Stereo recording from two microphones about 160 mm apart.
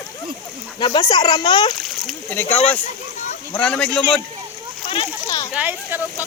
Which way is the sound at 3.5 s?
5° left (ahead or behind).